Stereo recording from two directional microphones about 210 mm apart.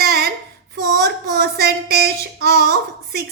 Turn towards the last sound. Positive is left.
turn(degrees=-50)  # may be behind; listen again after turning